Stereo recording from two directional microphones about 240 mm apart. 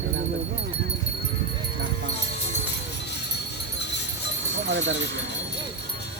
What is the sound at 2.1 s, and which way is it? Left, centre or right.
Music, left.